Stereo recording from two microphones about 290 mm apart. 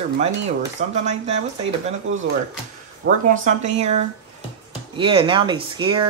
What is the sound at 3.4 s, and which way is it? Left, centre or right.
Speech, right.